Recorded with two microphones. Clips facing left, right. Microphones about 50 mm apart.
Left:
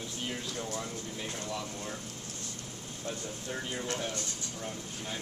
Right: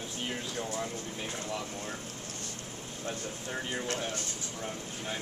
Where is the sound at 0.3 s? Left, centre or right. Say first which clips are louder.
Right 2 dB; centre.